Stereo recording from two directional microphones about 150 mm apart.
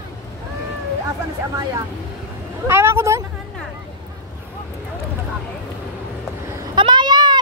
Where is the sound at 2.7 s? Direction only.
15° right (ahead or behind).